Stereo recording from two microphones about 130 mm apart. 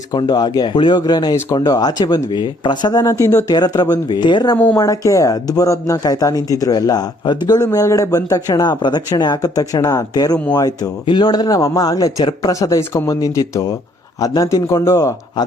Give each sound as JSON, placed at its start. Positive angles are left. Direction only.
{"t": 0.1, "sound": "speech", "side_deg": 35}
{"t": 4.5, "sound": "speech", "side_deg": 10}
{"t": 4.8, "sound": "speech", "side_deg": 25}
{"t": 15.4, "sound": "speech", "side_deg": 35}